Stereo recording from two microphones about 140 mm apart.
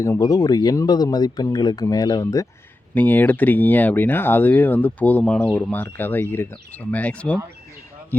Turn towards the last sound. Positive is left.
turn(degrees=10)  # may be behind; listen again after turning